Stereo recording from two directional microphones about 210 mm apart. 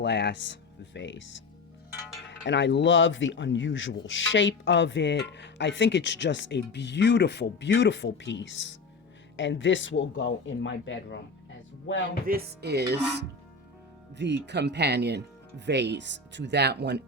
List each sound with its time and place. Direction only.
0.0 s speech: 55° left (ahead or behind)
2.5 s speech: 55° left (ahead or behind)
12.2 s music: 50° right (ahead or behind)
14.2 s speech: 55° right (ahead or behind)